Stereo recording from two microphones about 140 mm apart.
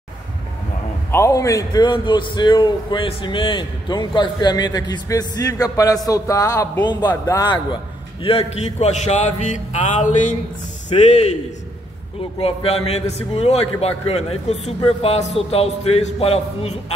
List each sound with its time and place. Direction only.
1.1 s a man's voice: 20° left (ahead or behind)
8.2 s a man's voice: 45° left (ahead or behind)
12.4 s a man's voice: 45° left (ahead or behind)